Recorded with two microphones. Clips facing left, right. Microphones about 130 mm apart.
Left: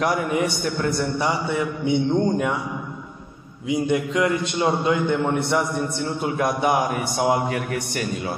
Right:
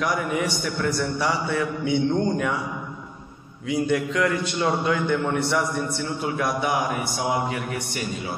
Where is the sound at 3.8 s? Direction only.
20° left (ahead or behind).